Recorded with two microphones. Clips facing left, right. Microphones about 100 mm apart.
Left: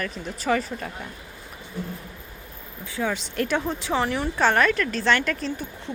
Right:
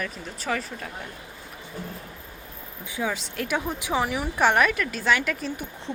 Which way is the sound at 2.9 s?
5° right (ahead or behind).